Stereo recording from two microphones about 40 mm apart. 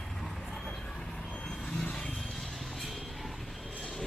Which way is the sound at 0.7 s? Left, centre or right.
Centre.